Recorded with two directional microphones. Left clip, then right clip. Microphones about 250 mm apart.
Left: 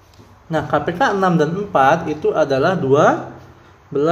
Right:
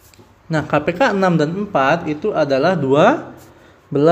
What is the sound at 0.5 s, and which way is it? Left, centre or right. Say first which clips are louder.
A man's voice: right 1 dB; right.